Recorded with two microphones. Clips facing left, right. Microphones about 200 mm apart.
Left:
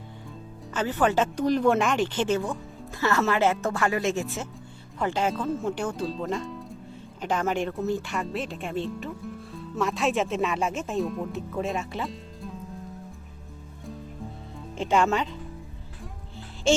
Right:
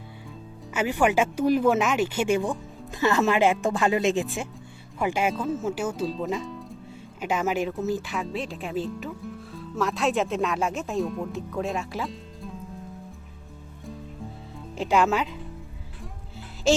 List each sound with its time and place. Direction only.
0.7 s speech: 10° right (ahead or behind)
14.8 s speech: centre (ahead or behind)
16.7 s music: centre (ahead or behind)